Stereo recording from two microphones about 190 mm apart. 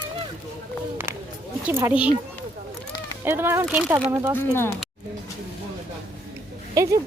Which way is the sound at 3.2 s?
10° right (ahead or behind).